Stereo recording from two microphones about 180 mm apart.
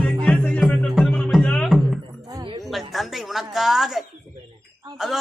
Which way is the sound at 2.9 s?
Centre (ahead or behind).